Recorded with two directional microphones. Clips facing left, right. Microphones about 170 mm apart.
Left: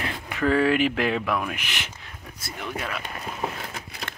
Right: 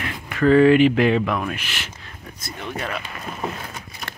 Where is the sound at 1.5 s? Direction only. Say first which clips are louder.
Right 1 dB; 15° left (ahead or behind).